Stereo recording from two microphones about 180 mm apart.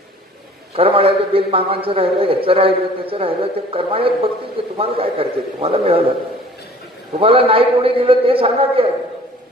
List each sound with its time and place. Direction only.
0.7 s a man's voice: 30° right (ahead or behind)
7.2 s a man's voice: 30° right (ahead or behind)